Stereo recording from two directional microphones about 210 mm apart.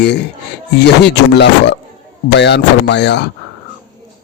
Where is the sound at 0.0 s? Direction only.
55° left (ahead or behind).